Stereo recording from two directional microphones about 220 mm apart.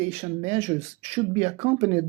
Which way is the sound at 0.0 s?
30° right (ahead or behind).